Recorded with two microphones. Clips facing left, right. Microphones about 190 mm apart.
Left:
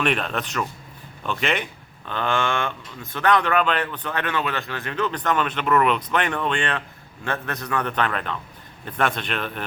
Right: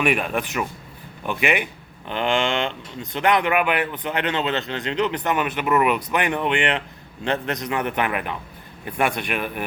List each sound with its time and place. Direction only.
0.0 s speech: 10° right (ahead or behind)